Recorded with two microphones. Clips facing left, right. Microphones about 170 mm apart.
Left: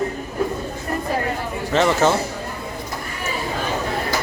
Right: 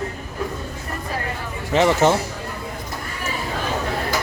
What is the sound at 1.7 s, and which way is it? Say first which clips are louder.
Speech: right 1 dB; 15° right (ahead or behind).